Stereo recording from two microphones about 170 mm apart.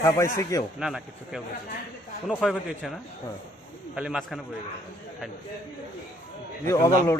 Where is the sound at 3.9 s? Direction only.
5° right (ahead or behind).